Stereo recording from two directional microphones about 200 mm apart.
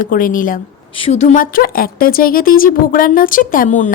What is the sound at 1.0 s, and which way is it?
Speech, 30° left (ahead or behind).